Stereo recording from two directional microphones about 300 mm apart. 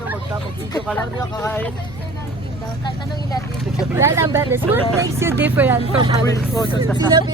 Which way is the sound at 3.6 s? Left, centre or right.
Centre.